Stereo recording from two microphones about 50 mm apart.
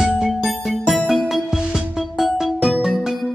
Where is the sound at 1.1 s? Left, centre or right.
Centre.